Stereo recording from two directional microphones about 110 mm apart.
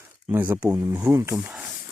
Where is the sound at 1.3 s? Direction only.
5° right (ahead or behind).